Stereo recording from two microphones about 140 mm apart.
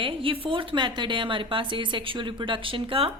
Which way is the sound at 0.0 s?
40° right (ahead or behind).